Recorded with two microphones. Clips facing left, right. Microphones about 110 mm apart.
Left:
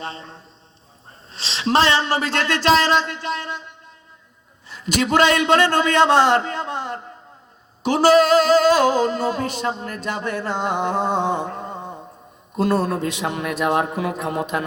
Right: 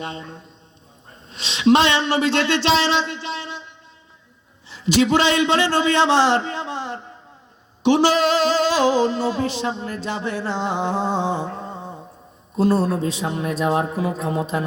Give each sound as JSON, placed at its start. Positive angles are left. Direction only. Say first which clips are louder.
{"t": 0.0, "sound": "a man's voice", "louder": "right 1 dB", "side_deg": 35}
{"t": 1.3, "sound": "music", "louder": "right 5 dB", "side_deg": 35}
{"t": 4.7, "sound": "a man's voice", "louder": "right 2 dB", "side_deg": 50}
{"t": 7.9, "sound": "music", "louder": "left 2 dB", "side_deg": 45}
{"t": 11.6, "sound": "mantra", "louder": "left 1 dB", "side_deg": 55}
{"t": 12.5, "sound": "speech", "louder": "right 1 dB", "side_deg": 65}